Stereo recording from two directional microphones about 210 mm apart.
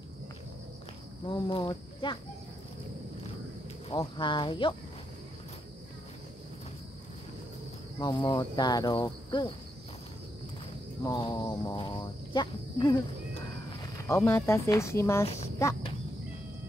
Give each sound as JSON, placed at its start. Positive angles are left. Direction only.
{"t": 1.2, "sound": "speech", "side_deg": 20}
{"t": 3.9, "sound": "cricket", "side_deg": 20}
{"t": 8.0, "sound": "cricket", "side_deg": 20}
{"t": 11.1, "sound": "speech", "side_deg": 20}